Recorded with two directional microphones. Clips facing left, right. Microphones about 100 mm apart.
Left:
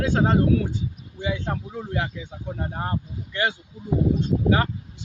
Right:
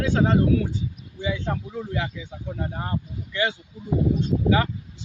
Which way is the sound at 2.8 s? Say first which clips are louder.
Left 1 dB; 45° left (ahead or behind).